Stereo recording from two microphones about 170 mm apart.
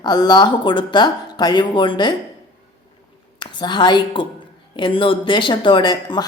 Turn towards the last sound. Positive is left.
turn(degrees=25)  # may be behind; listen again after turning